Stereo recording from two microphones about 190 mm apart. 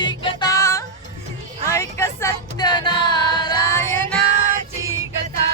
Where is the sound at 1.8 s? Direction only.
15° left (ahead or behind).